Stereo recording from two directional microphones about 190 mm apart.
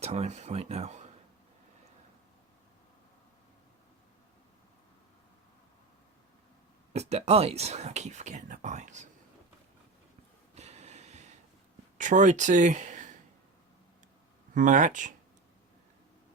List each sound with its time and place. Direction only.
0.0 s speech: 35° right (ahead or behind)
6.9 s speech: 35° right (ahead or behind)
10.5 s snort: 35° right (ahead or behind)
11.9 s speech: 40° right (ahead or behind)
14.5 s speech: 40° right (ahead or behind)